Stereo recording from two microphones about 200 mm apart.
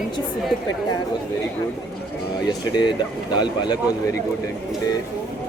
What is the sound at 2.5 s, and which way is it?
A woman's voice, 20° left (ahead or behind).